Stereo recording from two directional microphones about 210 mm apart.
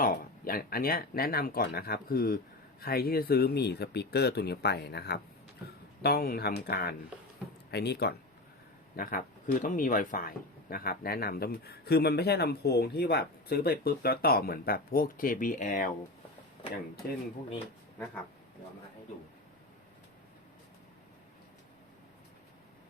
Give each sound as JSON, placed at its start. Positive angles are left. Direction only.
{"t": 0.0, "sound": "speech", "side_deg": 45}